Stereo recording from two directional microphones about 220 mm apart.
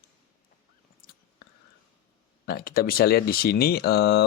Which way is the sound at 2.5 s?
45° left (ahead or behind).